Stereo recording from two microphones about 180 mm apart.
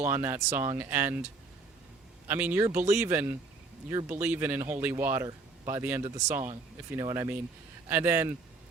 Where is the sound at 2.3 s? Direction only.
10° right (ahead or behind).